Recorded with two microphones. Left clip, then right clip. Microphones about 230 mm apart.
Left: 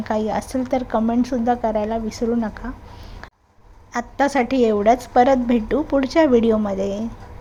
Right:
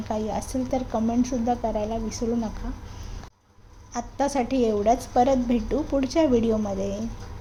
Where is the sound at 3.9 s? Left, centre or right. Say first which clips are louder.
Left 6 dB; centre.